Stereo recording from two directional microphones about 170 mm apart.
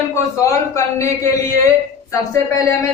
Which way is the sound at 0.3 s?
20° left (ahead or behind).